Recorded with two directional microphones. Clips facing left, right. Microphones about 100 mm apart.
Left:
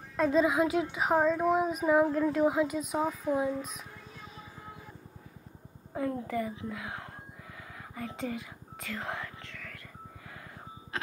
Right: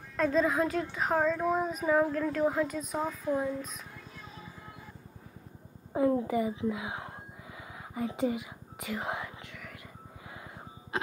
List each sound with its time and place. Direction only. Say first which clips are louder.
0.1 s a woman's voice: left 1 dB; 10° left (ahead or behind)
5.9 s gasp: right 5 dB; 20° right (ahead or behind)